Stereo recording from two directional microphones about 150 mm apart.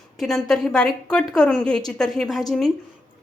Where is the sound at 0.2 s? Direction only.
Centre (ahead or behind).